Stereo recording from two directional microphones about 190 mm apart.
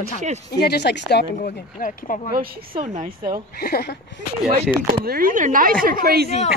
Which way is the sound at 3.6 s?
55° left (ahead or behind).